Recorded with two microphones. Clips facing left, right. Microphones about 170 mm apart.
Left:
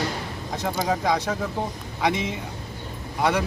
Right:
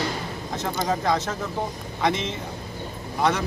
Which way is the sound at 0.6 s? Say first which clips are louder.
Left 1 dB; 10° left (ahead or behind).